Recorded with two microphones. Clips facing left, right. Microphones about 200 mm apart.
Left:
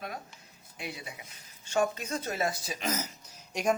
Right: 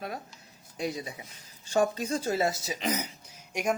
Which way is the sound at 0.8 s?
40° right (ahead or behind).